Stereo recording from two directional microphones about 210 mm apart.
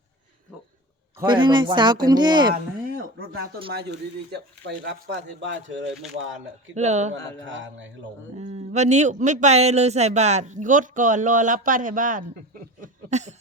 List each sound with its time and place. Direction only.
1.2 s speech: 20° right (ahead or behind)
2.5 s a sound: 45° right (ahead or behind)
3.3 s speech: 50° right (ahead or behind)
6.7 s speech: 35° right (ahead or behind)
7.4 s speech: 65° right (ahead or behind)
8.4 s speech: 30° right (ahead or behind)
12.8 s a sound: 35° right (ahead or behind)